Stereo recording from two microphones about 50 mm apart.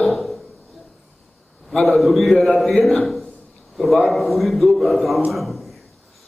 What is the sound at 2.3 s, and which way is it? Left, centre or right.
Speech, left.